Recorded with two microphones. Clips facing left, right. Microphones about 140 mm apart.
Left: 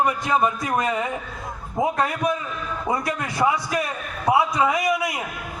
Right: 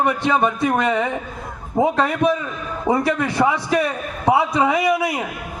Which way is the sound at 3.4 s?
30° right (ahead or behind).